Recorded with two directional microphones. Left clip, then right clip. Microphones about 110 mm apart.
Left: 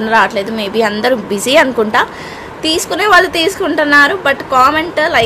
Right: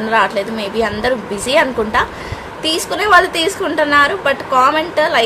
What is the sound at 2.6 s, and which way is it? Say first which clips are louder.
A woman's voice: left 3 dB; 35° left (ahead or behind).